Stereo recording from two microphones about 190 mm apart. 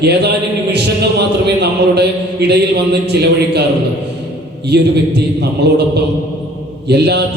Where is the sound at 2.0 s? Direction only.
60° right (ahead or behind).